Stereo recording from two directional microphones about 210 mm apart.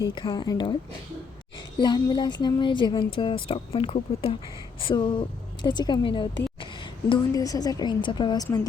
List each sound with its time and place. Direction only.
0.0 s a woman's voice: 20° left (ahead or behind)
1.8 s a woman's voice: 20° left (ahead or behind)